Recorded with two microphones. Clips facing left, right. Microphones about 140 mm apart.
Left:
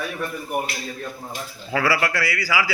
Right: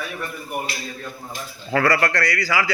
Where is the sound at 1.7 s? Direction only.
5° left (ahead or behind).